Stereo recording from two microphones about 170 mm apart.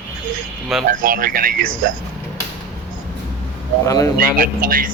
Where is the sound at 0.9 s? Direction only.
55° right (ahead or behind).